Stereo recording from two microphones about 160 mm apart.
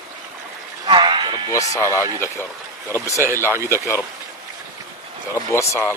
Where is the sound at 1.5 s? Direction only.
15° left (ahead or behind).